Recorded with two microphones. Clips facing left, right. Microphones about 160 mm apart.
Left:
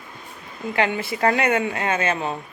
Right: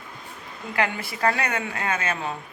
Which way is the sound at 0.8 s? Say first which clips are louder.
Left 3 dB; 25° left (ahead or behind).